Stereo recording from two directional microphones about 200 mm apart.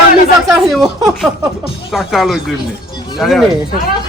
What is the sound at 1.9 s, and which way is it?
A woman's voice, centre (ahead or behind).